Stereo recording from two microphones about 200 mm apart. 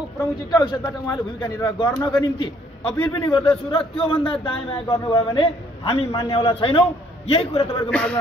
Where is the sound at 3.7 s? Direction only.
25° left (ahead or behind).